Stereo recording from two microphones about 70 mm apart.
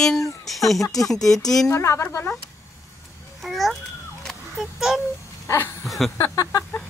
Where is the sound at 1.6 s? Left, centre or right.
Left.